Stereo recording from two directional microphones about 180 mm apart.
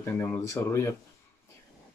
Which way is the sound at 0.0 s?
15° left (ahead or behind).